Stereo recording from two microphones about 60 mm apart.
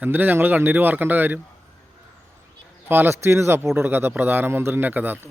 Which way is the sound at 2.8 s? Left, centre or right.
Right.